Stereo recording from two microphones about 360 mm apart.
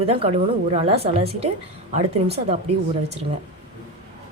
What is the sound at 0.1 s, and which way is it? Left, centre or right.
A woman's voice, centre.